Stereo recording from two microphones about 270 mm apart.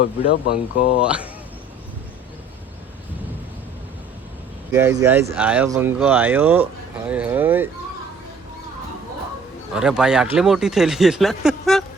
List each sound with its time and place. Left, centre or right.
0.0 s speech: left
1.0 s speech: centre
4.7 s speech: centre
9.7 s speech: centre